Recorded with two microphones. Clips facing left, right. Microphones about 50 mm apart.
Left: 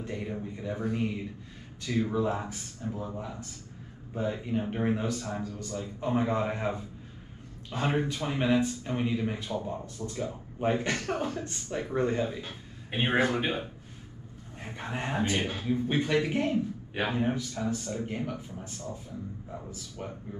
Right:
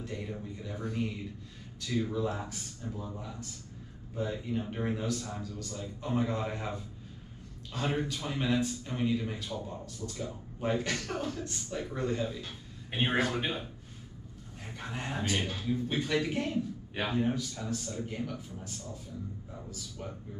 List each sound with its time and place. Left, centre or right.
0.0 s speech: left